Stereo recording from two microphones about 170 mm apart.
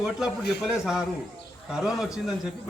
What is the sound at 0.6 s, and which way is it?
A man's voice, 5° right (ahead or behind).